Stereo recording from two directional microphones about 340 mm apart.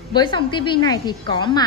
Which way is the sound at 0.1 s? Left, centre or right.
Centre.